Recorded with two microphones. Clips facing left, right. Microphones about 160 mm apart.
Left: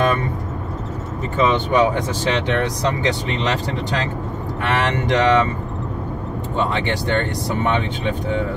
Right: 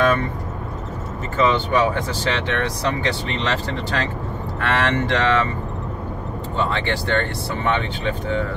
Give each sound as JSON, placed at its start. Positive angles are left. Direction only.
{"t": 1.3, "sound": "speech", "side_deg": 20}
{"t": 6.5, "sound": "speech", "side_deg": 15}